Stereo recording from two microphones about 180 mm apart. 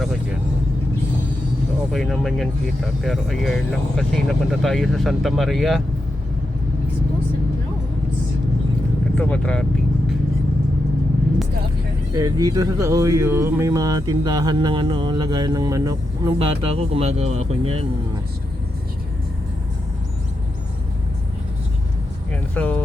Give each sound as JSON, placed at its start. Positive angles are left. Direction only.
{"t": 1.9, "sound": "speech", "side_deg": 0}
{"t": 9.1, "sound": "speech", "side_deg": 10}
{"t": 12.1, "sound": "speech", "side_deg": -20}
{"t": 22.3, "sound": "music", "side_deg": 5}